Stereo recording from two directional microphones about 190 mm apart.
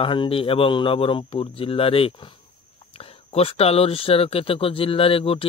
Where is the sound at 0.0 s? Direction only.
25° left (ahead or behind).